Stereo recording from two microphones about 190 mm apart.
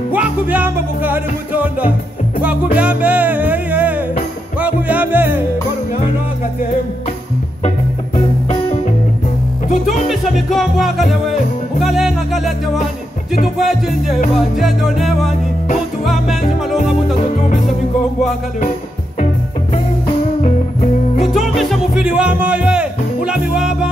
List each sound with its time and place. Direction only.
0.1 s music: 10° right (ahead or behind)
10.0 s music: centre (ahead or behind)
13.6 s music: centre (ahead or behind)
20.4 s music: 35° left (ahead or behind)
21.4 s music: centre (ahead or behind)